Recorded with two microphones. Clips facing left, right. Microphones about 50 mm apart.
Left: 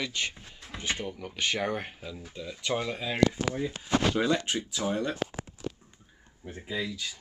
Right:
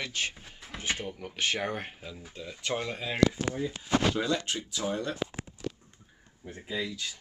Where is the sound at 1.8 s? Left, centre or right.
Centre.